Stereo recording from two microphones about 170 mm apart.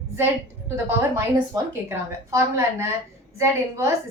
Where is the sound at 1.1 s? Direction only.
15° right (ahead or behind).